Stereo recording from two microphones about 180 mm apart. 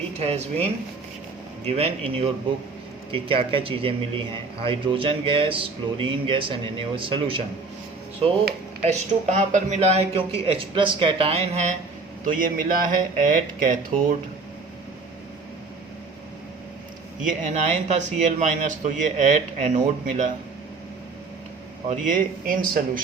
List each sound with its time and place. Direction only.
0.2 s speech: 35° right (ahead or behind)
8.8 s speech: 40° right (ahead or behind)
12.2 s speech: 45° right (ahead or behind)
17.2 s speech: 40° right (ahead or behind)
21.8 s speech: 50° right (ahead or behind)